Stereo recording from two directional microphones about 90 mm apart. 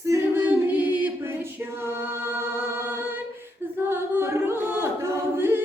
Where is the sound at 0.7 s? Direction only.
20° right (ahead or behind).